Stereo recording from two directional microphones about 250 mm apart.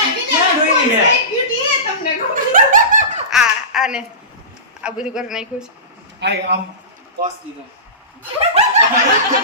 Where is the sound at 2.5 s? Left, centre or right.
Right.